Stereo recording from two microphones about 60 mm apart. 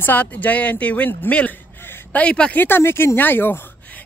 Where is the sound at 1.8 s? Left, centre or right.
Left.